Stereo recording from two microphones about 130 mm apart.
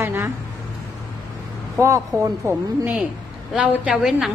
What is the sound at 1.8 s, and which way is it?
Speech, 25° right (ahead or behind).